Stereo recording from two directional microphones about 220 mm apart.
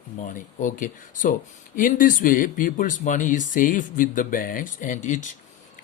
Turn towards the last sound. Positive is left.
turn(degrees=35)  # may be behind; listen again after turning